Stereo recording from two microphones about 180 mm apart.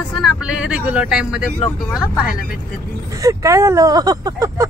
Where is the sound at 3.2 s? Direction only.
15° right (ahead or behind).